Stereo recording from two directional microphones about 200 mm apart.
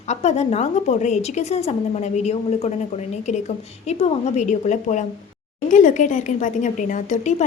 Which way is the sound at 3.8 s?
35° left (ahead or behind).